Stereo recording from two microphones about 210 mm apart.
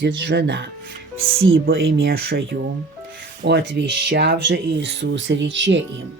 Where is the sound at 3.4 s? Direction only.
60° right (ahead or behind).